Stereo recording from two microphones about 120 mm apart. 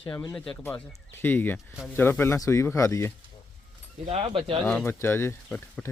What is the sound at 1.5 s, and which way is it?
Speech, 5° right (ahead or behind).